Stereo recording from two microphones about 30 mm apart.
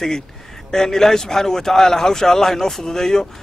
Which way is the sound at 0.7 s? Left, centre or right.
Centre.